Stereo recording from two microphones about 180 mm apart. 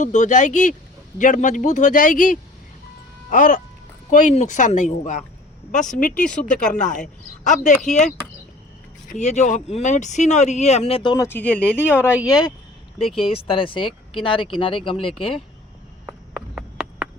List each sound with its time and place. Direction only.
0.0 s a man's voice: 40° left (ahead or behind)
9.1 s speech: 40° left (ahead or behind)
16.0 s a sound: centre (ahead or behind)